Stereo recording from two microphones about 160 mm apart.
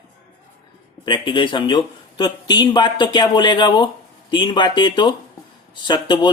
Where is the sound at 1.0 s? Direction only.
30° left (ahead or behind).